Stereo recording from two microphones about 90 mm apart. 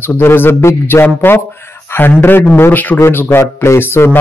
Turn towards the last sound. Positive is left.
turn(degrees=30)  # may be behind; listen again after turning